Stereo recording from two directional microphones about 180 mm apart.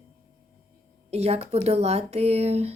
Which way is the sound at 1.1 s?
35° right (ahead or behind).